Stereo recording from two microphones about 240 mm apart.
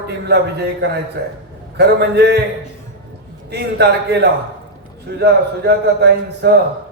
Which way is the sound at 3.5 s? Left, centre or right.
Right.